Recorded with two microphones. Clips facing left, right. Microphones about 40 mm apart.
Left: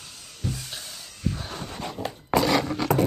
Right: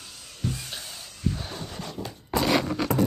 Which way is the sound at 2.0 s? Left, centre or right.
Left.